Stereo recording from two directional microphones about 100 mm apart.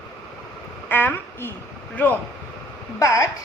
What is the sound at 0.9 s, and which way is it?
Speech, 20° left (ahead or behind).